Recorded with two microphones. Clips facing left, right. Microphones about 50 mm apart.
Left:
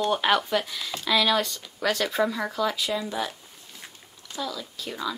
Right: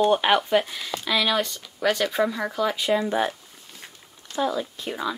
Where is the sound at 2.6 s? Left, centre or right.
Centre.